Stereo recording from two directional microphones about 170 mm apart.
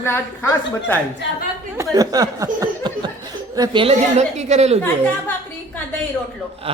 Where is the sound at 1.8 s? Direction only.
20° right (ahead or behind).